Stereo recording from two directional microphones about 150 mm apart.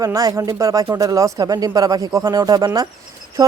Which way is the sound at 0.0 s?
25° right (ahead or behind).